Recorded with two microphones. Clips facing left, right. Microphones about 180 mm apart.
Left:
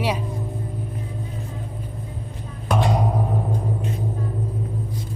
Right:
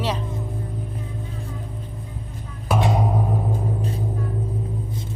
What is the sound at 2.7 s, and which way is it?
Music, centre (ahead or behind).